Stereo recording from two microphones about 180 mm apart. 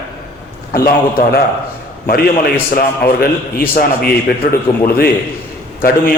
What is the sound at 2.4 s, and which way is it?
A man's voice, 55° left (ahead or behind).